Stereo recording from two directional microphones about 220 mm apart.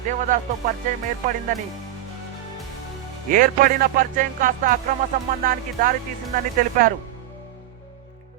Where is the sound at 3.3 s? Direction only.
40° right (ahead or behind).